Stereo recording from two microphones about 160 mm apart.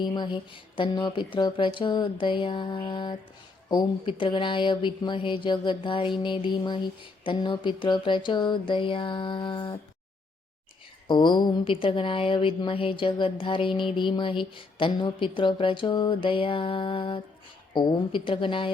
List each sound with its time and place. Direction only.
0.0 s speech: 30° left (ahead or behind)
11.1 s speech: 30° left (ahead or behind)